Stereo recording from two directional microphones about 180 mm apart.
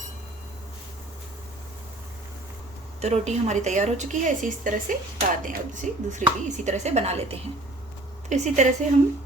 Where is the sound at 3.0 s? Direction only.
40° right (ahead or behind).